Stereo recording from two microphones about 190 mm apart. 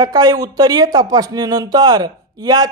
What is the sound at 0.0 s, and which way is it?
Speech, 20° right (ahead or behind).